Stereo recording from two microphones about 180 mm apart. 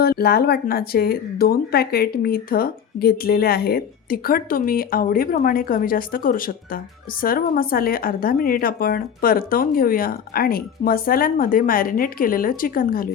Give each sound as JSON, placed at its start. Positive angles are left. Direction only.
{"t": 0.0, "sound": "a woman's voice", "side_deg": 60}